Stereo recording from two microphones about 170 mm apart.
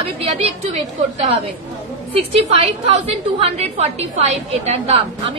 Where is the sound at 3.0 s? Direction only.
35° right (ahead or behind).